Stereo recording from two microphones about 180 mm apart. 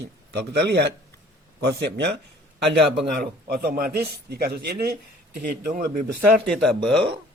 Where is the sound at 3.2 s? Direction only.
60° right (ahead or behind).